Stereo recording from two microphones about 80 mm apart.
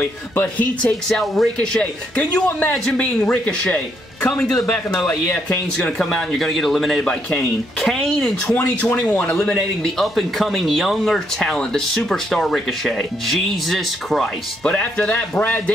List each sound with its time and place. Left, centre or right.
0.0 s speech: left
1.0 s a man's voice: centre
9.1 s speech: centre
14.6 s a man's voice: centre